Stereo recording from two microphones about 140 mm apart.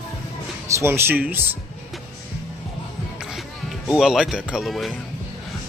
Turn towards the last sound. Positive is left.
turn(degrees=0)  # may be behind; listen again after turning